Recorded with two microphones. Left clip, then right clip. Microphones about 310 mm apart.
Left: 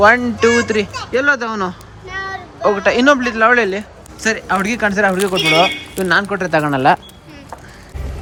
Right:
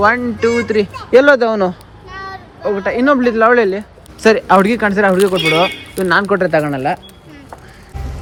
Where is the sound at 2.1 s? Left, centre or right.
Left.